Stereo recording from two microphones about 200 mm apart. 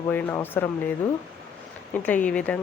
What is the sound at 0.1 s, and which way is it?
Speech, 10° left (ahead or behind).